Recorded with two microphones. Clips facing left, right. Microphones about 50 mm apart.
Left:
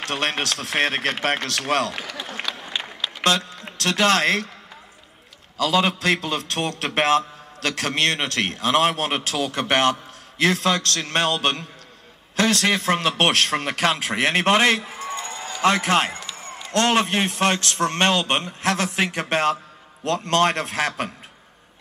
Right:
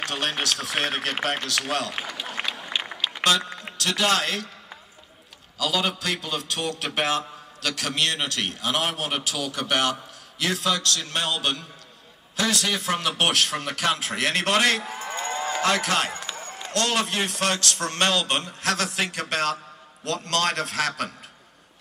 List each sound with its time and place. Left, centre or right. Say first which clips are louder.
0.0 s a man's voice: left 3 dB; left
2.3 s a sound: even; right
3.7 s a man's voice: left 4 dB; left
5.6 s a man's voice: left 5 dB; left
14.1 s a man's voice: left 6 dB; left
15.1 s a sound: right 4 dB; right
15.6 s a man's voice: left 6 dB; left